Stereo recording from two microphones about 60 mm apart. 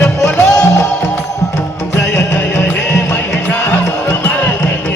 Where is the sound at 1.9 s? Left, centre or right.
Left.